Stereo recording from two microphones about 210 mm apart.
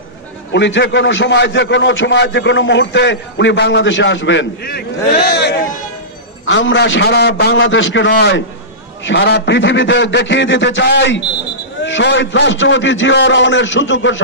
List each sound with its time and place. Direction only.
0.5 s a man's voice: 60° left (ahead or behind)
6.4 s a man's voice: 60° left (ahead or behind)
8.1 s a man's voice: 50° left (ahead or behind)